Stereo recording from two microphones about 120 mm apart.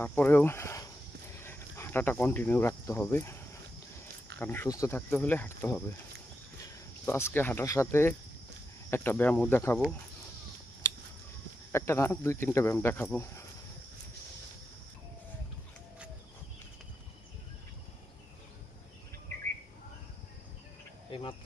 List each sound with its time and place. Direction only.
0.0 s speech: 20° left (ahead or behind)
4.0 s cricket: 15° left (ahead or behind)
4.9 s speech: 15° left (ahead or behind)
7.0 s speech: 20° left (ahead or behind)
11.7 s speech: 20° left (ahead or behind)
21.1 s insect: 45° left (ahead or behind)